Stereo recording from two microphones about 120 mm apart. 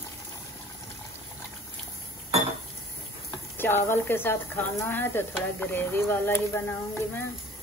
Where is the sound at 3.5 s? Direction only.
20° left (ahead or behind).